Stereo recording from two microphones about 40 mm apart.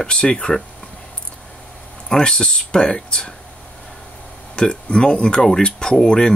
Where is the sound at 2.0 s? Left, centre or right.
Centre.